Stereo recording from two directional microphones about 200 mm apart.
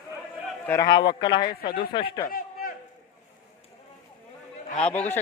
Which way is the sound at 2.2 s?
45° left (ahead or behind).